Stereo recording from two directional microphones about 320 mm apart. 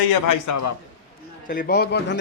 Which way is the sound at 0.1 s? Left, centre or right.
Left.